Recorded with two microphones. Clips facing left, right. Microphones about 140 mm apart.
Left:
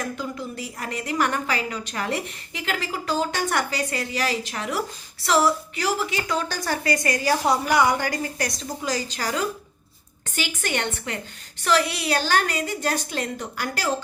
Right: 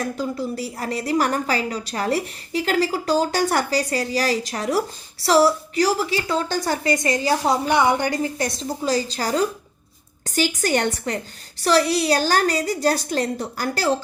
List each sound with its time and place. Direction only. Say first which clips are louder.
0.0 s a woman's voice: right 5 dB; 35° right (ahead or behind)